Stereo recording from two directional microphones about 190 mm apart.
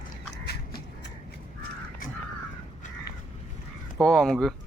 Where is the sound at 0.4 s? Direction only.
55° left (ahead or behind).